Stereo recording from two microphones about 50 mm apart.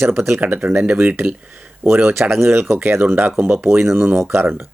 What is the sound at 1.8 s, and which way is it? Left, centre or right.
Speech, right.